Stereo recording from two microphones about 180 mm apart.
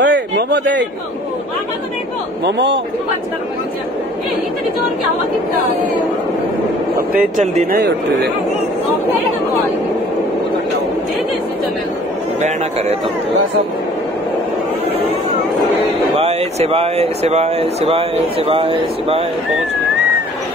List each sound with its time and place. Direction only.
0.0 s a sound: 75° right (ahead or behind)
2.4 s a man's voice: 75° right (ahead or behind)
7.0 s speech: 50° right (ahead or behind)
12.4 s speech: 40° right (ahead or behind)
16.2 s speech: 35° right (ahead or behind)